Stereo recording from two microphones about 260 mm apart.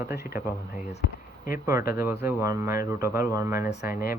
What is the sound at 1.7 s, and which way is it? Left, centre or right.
Speech, centre.